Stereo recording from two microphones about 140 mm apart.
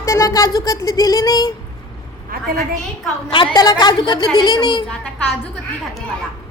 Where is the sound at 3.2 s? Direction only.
35° left (ahead or behind).